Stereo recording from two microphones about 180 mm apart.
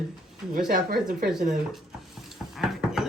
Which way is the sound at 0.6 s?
55° right (ahead or behind).